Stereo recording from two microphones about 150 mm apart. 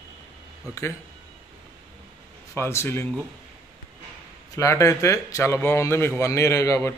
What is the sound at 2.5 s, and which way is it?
Speech, 15° left (ahead or behind).